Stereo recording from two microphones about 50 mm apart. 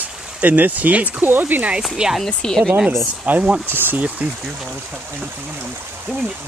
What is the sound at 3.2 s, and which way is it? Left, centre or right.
Speech, right.